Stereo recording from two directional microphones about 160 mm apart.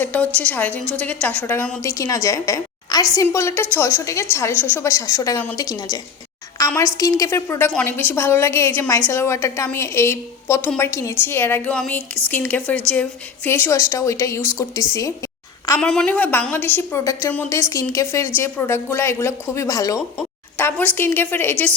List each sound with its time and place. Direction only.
0.0 s a woman's voice: 10° left (ahead or behind)
15.8 s a woman's voice: 5° left (ahead or behind)